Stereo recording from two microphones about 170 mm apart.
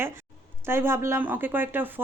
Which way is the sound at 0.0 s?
15° right (ahead or behind).